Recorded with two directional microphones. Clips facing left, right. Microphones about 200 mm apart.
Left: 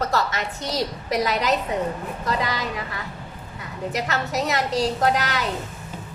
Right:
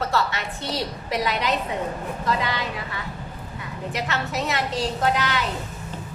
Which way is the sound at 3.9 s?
40° left (ahead or behind).